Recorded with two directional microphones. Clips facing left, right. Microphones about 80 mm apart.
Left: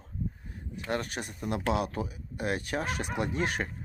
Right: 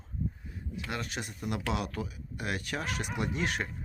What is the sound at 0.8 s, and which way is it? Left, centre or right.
Speech, left.